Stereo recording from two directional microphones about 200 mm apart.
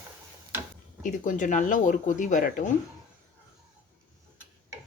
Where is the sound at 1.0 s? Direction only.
40° left (ahead or behind).